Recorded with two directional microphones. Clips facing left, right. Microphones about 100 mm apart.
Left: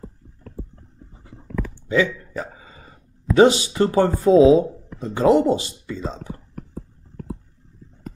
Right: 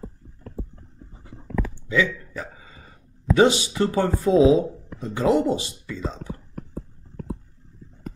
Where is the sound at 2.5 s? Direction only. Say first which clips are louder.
Left 2 dB; 35° left (ahead or behind).